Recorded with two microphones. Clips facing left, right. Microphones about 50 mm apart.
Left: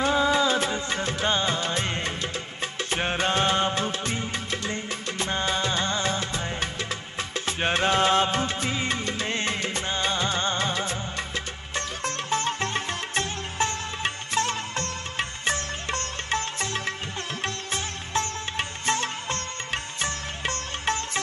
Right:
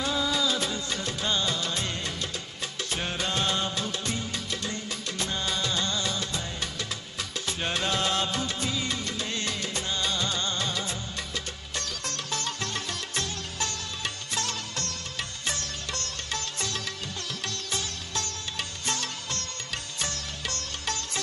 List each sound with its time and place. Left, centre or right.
0.0 s music of bollywood: left
7.2 s music: left